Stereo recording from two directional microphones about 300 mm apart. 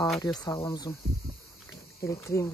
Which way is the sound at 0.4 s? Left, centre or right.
Centre.